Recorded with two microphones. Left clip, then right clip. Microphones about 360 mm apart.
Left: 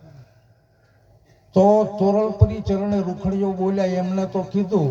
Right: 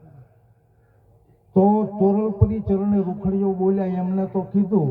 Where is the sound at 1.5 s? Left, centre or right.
Left.